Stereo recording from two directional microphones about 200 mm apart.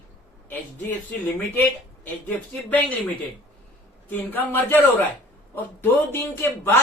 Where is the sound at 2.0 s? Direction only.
10° left (ahead or behind).